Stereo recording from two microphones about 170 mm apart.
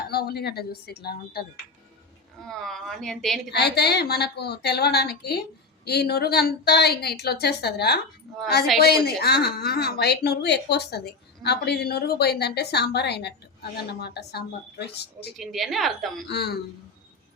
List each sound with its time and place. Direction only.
0.1 s a woman's voice: 65° left (ahead or behind)
2.4 s a woman's voice: centre (ahead or behind)
3.5 s a woman's voice: 75° left (ahead or behind)
9.0 s a woman's voice: 65° left (ahead or behind)
15.4 s a woman's voice: centre (ahead or behind)
16.3 s a woman's voice: 70° left (ahead or behind)